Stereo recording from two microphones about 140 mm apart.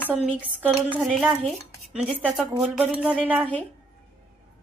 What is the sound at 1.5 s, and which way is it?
Dishes, 10° right (ahead or behind).